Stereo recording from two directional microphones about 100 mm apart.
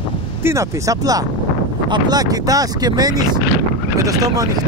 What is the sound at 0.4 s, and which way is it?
Speech, 30° right (ahead or behind).